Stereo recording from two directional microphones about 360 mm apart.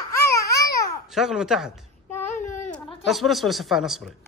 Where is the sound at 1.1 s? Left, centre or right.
Centre.